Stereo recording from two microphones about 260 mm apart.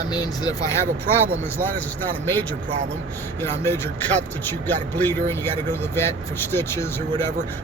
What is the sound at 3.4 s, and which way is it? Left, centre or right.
Speech, centre.